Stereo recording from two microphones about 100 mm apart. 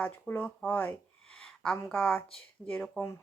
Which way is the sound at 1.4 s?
5° left (ahead or behind).